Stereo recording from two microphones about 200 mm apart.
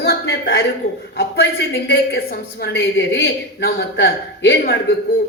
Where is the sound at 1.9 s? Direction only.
50° left (ahead or behind).